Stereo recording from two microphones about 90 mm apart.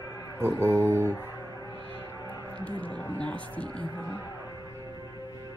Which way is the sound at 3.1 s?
15° left (ahead or behind).